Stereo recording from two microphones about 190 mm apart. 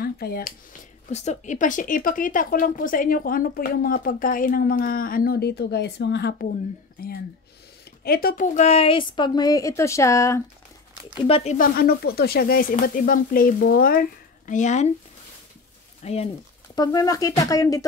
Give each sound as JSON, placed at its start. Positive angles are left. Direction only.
{"t": 0.0, "sound": "speech", "side_deg": 50}
{"t": 1.1, "sound": "a woman's voice", "side_deg": 35}
{"t": 11.2, "sound": "speech", "side_deg": 30}
{"t": 11.5, "sound": "speech", "side_deg": 50}
{"t": 16.0, "sound": "speech", "side_deg": 35}
{"t": 16.7, "sound": "a woman's voice", "side_deg": 20}